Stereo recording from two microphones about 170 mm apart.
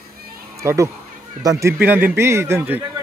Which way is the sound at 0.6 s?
20° right (ahead or behind).